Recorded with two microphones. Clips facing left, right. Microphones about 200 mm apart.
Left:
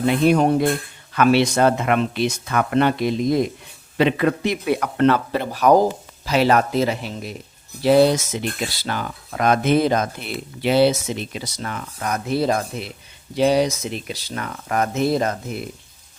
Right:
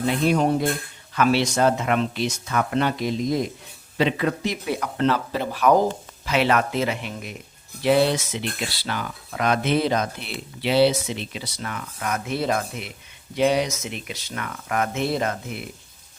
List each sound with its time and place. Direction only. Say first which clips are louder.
0.0 s speech: left 4 dB; 60° left (ahead or behind)
5.5 s speech: left 3 dB; 40° left (ahead or behind)